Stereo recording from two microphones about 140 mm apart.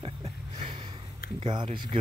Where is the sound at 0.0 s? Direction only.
40° right (ahead or behind).